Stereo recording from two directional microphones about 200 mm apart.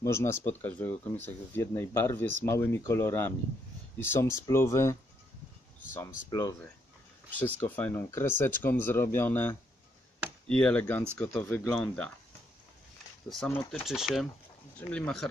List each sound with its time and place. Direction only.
0.0 s speech: 15° left (ahead or behind)
6.3 s speech: 15° left (ahead or behind)
13.3 s speech: 5° left (ahead or behind)